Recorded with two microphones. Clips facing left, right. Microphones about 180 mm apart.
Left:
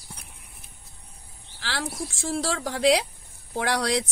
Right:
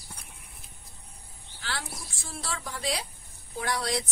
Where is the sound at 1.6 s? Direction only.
90° left.